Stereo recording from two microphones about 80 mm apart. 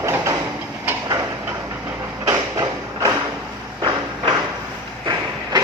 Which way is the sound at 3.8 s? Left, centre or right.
Right.